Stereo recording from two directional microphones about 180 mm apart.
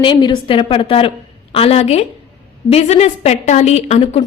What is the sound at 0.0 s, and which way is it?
A woman's voice, 25° left (ahead or behind).